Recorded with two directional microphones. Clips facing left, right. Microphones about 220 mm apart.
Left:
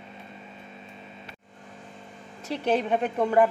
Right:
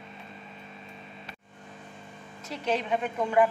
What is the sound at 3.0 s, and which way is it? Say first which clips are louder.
Speech: left 3 dB; 35° left (ahead or behind).